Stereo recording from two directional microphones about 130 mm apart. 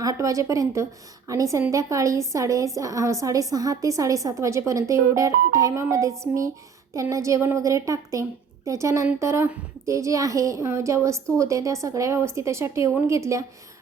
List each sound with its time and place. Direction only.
0.0 s a woman's voice: 25° right (ahead or behind)